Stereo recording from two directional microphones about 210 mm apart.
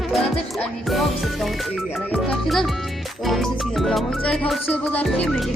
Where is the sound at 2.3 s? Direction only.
Centre (ahead or behind).